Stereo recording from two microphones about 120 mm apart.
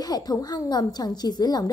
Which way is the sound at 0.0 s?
35° left (ahead or behind).